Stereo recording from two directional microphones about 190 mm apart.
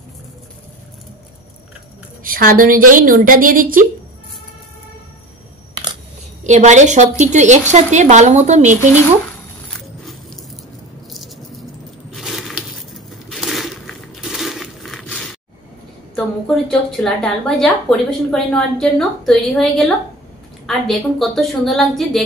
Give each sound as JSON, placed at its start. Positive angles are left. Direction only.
{"t": 2.2, "sound": "a woman's voice", "side_deg": -50}
{"t": 6.4, "sound": "a woman's voice", "side_deg": -40}
{"t": 11.1, "sound": "a sound", "side_deg": 0}
{"t": 16.4, "sound": "a woman's voice", "side_deg": 0}